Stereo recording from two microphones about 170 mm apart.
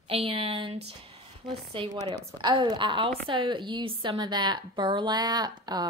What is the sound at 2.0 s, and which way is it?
A woman's voice, 30° right (ahead or behind).